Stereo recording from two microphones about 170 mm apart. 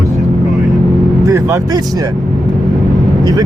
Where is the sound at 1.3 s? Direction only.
15° right (ahead or behind).